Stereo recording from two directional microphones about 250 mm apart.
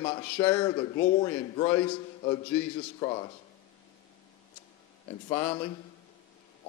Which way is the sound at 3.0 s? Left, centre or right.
Left.